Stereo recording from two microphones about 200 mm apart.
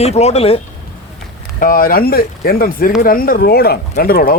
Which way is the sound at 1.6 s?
45° left (ahead or behind).